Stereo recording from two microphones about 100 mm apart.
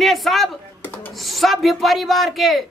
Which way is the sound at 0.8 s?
20° left (ahead or behind).